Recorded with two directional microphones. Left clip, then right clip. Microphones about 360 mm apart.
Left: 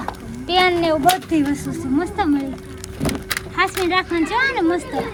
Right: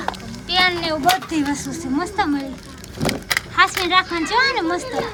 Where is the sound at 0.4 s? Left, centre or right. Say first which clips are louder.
Left 2 dB; centre.